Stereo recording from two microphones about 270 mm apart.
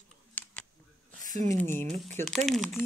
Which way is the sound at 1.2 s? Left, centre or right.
Right.